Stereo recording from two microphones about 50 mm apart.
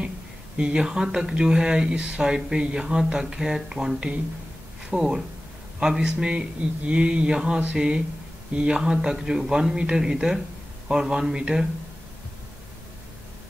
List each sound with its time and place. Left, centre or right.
0.6 s speech: centre
6.3 s a sound: right
7.7 s speech: centre